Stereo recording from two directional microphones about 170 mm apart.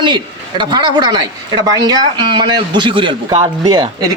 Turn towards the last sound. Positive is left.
turn(degrees=-25)  # may be behind; listen again after turning